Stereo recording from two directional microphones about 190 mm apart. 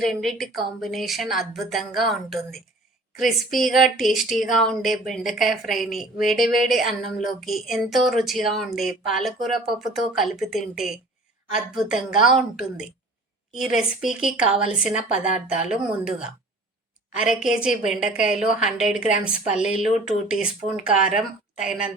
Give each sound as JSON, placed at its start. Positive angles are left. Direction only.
{"t": 0.0, "sound": "speech", "side_deg": 0}
{"t": 17.2, "sound": "speech", "side_deg": -5}
{"t": 18.9, "sound": "a woman's voice", "side_deg": 40}
{"t": 19.2, "sound": "speech", "side_deg": -5}